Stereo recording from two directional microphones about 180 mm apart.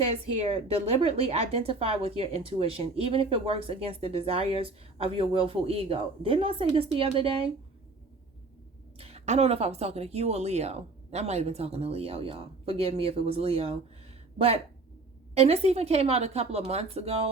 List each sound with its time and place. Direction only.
0.0 s a woman's voice: 35° right (ahead or behind)
9.0 s a woman's voice: 35° right (ahead or behind)